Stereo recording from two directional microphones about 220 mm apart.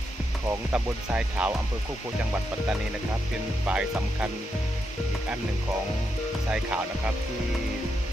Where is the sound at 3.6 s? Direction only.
5° right (ahead or behind).